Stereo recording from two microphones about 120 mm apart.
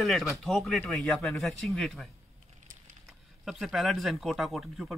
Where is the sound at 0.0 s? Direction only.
Centre (ahead or behind).